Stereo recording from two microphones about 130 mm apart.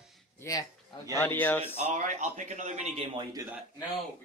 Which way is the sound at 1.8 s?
70° right (ahead or behind).